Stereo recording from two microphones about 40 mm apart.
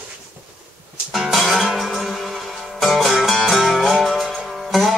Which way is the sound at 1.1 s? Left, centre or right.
Centre.